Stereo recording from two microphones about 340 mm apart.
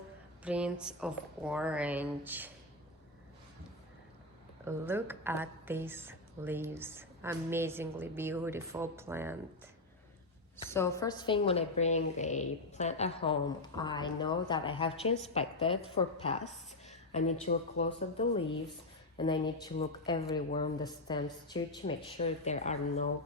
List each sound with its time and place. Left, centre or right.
0.4 s speech: centre
4.6 s a woman's voice: centre
10.6 s a woman's voice: centre